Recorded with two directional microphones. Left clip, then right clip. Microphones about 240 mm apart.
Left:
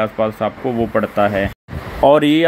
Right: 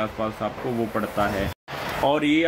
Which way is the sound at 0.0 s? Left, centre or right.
Left.